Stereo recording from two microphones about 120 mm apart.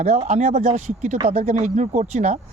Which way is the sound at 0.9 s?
90° right.